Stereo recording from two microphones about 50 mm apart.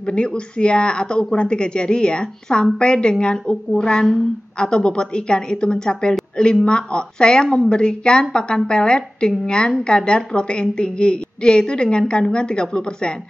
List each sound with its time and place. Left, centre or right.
0.0 s speech: left